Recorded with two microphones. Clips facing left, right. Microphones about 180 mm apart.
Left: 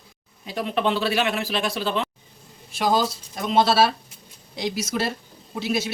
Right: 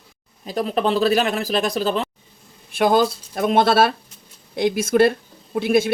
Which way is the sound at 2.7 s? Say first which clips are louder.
Right 5 dB; 55° right (ahead or behind).